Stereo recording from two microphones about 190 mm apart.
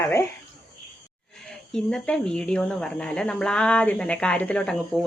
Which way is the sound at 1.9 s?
5° left (ahead or behind).